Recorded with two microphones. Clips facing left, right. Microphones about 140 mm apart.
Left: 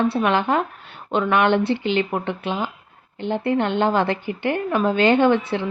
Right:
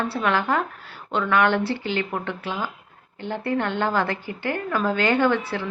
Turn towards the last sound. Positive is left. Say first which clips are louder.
# left 4 dB
turn(degrees=20)  # may be behind; listen again after turning